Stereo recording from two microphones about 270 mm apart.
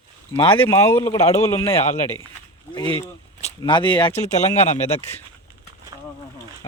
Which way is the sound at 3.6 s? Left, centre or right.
Centre.